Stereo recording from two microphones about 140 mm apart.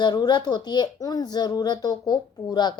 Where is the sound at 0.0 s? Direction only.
30° left (ahead or behind).